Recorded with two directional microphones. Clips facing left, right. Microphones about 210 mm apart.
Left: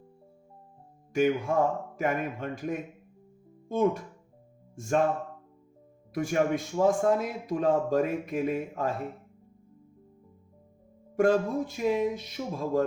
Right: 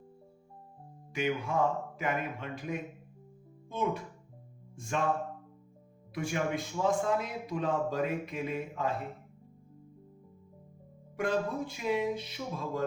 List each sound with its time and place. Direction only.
1.1 s a man's voice: 45° left (ahead or behind)
6.1 s a man's voice: 45° left (ahead or behind)
11.2 s a man's voice: 45° left (ahead or behind)